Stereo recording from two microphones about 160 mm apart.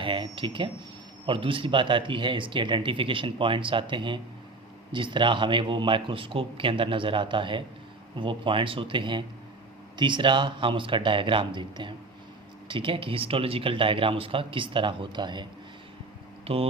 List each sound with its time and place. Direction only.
0.0 s speech: 30° right (ahead or behind)
16.5 s speech: 35° right (ahead or behind)